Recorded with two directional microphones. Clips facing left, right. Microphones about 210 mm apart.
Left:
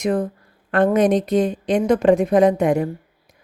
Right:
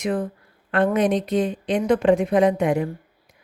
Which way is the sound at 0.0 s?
45° left (ahead or behind).